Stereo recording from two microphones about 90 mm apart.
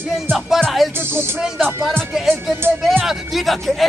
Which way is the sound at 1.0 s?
25° right (ahead or behind).